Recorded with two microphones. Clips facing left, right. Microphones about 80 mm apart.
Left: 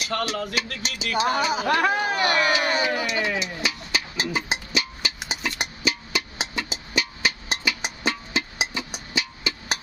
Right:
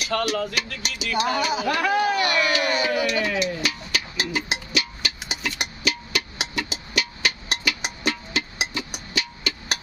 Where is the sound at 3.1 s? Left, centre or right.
Left.